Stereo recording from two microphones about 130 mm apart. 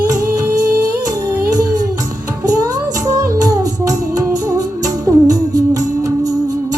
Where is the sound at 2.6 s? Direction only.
25° right (ahead or behind).